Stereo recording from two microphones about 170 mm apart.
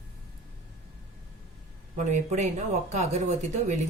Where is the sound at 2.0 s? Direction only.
45° right (ahead or behind).